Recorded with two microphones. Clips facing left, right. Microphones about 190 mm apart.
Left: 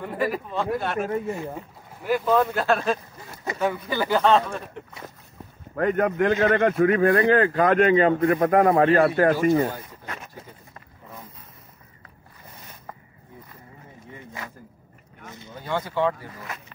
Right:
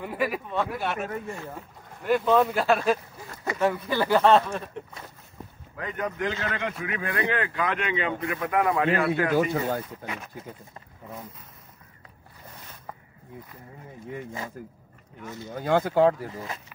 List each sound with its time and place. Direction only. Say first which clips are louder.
0.0 s speech: left 2 dB; 5° right (ahead or behind)
1.3 s speech: left 6 dB; 20° left (ahead or behind)
2.0 s speech: even; centre (ahead or behind)
5.8 s a man's voice: left 9 dB; 55° left (ahead or behind)
15.4 s speech: right 5 dB; 50° right (ahead or behind)